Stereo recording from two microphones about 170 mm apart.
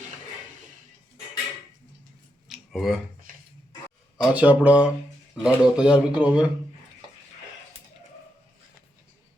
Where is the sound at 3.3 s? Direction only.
55° right (ahead or behind).